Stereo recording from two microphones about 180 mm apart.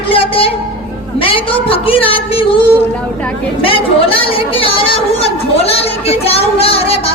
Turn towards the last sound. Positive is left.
turn(degrees=35)  # may be behind; listen again after turning